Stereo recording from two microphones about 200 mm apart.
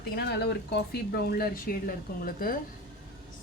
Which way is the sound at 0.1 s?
55° left (ahead or behind).